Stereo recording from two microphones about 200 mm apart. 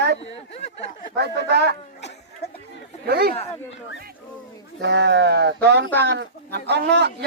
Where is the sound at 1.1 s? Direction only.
55° right (ahead or behind).